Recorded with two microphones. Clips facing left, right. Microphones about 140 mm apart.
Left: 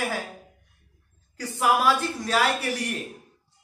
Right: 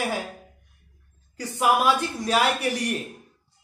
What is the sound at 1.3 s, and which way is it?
A man's voice, 20° right (ahead or behind).